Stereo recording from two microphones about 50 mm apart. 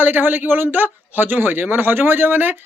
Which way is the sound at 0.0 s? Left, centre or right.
Right.